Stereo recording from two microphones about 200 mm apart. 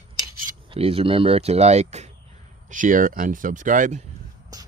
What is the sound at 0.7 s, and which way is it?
Speech, 30° right (ahead or behind).